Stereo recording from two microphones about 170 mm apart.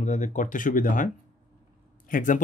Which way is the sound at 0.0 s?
45° left (ahead or behind).